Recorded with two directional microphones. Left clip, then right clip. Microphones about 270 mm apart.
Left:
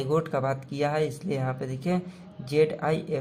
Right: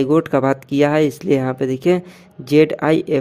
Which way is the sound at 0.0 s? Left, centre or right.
Right.